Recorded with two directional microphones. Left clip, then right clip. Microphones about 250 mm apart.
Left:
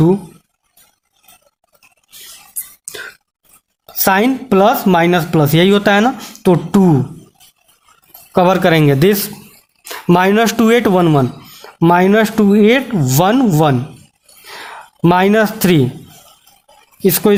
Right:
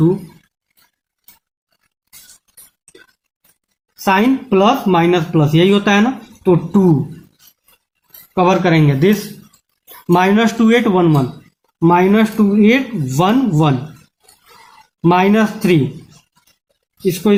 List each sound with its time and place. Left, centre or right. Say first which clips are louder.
4.0 s speech: left 1 dB; left
8.4 s speech: left 2 dB; left
15.0 s speech: left 2 dB; left
17.1 s speech: left 3 dB; left